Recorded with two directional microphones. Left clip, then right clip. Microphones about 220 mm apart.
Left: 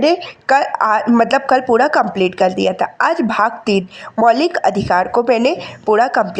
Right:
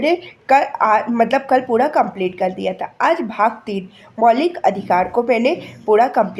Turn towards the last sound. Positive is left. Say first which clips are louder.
# left 1 dB
turn(degrees=25)  # may be behind; listen again after turning